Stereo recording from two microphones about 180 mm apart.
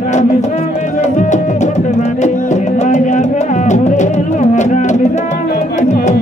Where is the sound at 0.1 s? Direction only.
40° left (ahead or behind).